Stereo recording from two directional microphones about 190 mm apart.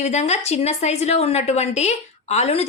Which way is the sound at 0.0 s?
35° left (ahead or behind).